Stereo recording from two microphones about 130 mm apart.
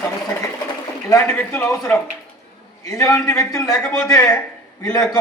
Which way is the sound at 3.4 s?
25° left (ahead or behind).